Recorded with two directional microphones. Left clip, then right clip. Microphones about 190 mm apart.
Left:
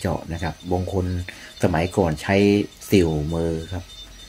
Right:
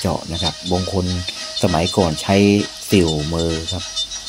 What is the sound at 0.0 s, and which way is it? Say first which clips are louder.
Speech: right 6 dB; 15° right (ahead or behind).